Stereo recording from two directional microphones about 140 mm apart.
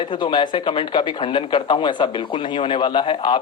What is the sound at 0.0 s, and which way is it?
A woman's voice, 35° left (ahead or behind).